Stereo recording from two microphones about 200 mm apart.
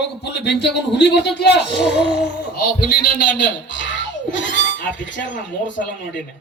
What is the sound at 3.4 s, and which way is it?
A man's voice, 65° left (ahead or behind).